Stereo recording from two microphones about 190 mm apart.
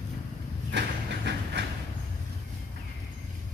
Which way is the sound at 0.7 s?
65° right (ahead or behind).